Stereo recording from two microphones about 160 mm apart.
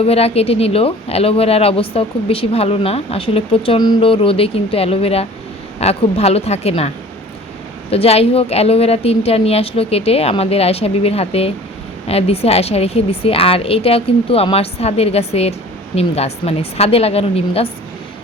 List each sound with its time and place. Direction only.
0.0 s a woman's voice: 40° left (ahead or behind)